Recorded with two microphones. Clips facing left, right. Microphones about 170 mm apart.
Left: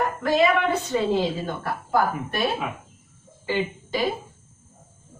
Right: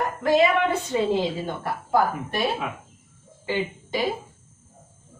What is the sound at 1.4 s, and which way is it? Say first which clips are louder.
Speech: even; 25° right (ahead or behind).